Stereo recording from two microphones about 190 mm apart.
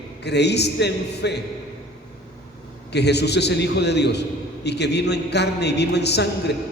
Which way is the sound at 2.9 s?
60° left (ahead or behind).